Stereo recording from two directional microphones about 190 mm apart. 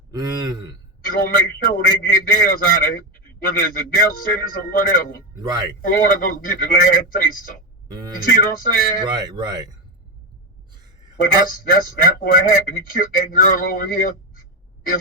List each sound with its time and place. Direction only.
0.1 s speech: 20° right (ahead or behind)
1.0 s a man's voice: 50° left (ahead or behind)
7.9 s speech: 20° right (ahead or behind)
8.3 s a man's voice: 45° left (ahead or behind)
9.0 s speech: 20° right (ahead or behind)
11.2 s a man's voice: 50° left (ahead or behind)